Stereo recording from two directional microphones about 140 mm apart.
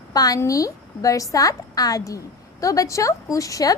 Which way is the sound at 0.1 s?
25° left (ahead or behind).